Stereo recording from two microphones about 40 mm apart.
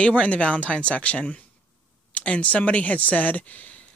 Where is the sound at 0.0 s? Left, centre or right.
Left.